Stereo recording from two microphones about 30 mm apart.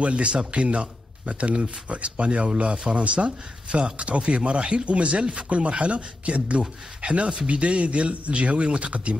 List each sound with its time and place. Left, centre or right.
0.0 s speech: right
3.6 s speech: right
4.0 s speech: right